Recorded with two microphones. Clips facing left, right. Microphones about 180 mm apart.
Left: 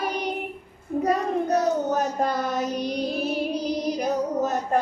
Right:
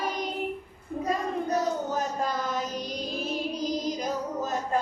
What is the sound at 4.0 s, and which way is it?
Music, 65° left (ahead or behind).